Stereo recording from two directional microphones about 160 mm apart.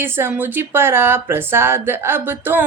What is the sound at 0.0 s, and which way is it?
Speech, 15° right (ahead or behind).